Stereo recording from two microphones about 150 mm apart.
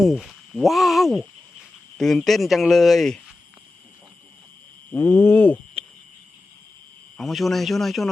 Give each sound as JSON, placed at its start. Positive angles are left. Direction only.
{"t": 0.0, "sound": "speech", "side_deg": 0}
{"t": 4.9, "sound": "a sound", "side_deg": 15}
{"t": 7.2, "sound": "speech", "side_deg": 0}